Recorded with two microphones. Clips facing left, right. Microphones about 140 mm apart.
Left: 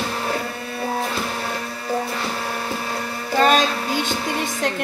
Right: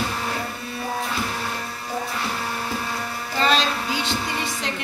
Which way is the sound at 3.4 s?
50° left (ahead or behind).